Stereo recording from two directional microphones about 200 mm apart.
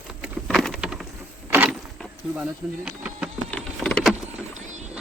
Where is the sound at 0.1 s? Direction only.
Centre (ahead or behind).